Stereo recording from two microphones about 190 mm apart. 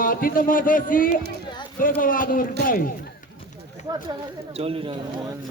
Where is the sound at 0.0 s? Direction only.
50° left (ahead or behind).